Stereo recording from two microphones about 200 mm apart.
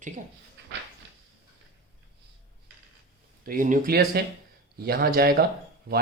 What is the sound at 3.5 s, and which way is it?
Speech, 40° right (ahead or behind).